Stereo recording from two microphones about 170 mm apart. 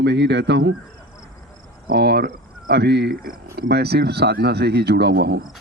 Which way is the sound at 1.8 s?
70° right (ahead or behind).